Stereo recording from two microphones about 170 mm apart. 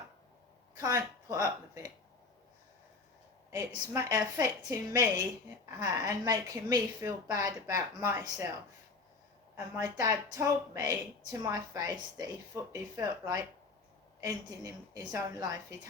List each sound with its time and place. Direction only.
0.8 s speech: 20° right (ahead or behind)
3.5 s speech: 20° right (ahead or behind)
9.7 s speech: 20° right (ahead or behind)